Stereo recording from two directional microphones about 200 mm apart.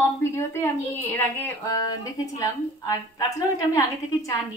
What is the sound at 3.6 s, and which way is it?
Speech, 15° left (ahead or behind).